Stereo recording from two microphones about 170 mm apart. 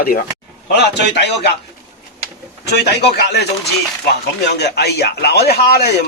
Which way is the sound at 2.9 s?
75° left (ahead or behind).